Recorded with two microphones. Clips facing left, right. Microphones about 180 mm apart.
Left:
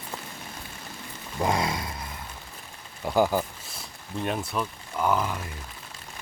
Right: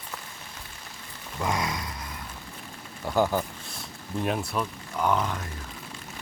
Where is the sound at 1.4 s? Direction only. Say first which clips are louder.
Left 3 dB; 30° left (ahead or behind).